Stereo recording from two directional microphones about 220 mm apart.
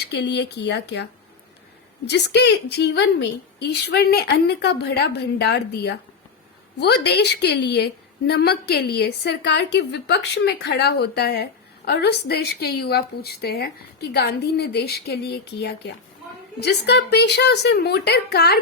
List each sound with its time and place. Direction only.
0.0 s a woman's voice: 50° left (ahead or behind)
2.0 s a woman's voice: 50° left (ahead or behind)